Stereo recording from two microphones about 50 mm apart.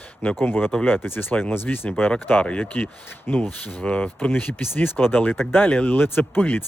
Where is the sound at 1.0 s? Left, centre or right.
Left.